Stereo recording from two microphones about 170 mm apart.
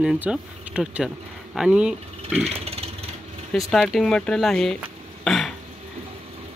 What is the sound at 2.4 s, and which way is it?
Vehicle, 35° right (ahead or behind).